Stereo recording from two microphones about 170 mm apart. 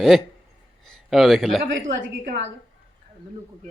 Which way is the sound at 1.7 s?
90° right.